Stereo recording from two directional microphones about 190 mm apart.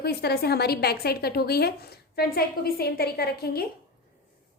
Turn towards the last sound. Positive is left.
turn(degrees=55)  # may be behind; listen again after turning